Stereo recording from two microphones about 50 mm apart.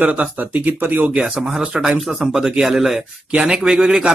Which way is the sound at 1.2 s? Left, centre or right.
Centre.